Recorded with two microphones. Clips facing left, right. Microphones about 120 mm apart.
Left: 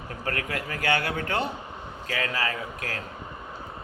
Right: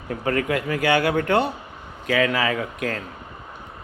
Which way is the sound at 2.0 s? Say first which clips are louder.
Right 9 dB; 90° right.